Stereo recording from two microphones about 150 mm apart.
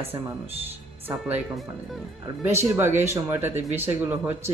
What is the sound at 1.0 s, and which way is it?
Speech, 10° right (ahead or behind).